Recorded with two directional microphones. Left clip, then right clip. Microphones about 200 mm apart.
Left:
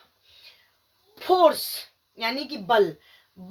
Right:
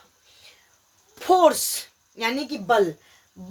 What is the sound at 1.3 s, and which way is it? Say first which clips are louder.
Speech: right 1 dB; 35° right (ahead or behind).